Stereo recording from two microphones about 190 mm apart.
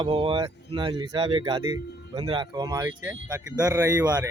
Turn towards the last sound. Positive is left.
turn(degrees=-20)  # may be behind; listen again after turning